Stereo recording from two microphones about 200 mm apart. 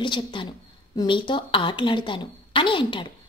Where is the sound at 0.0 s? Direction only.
25° left (ahead or behind).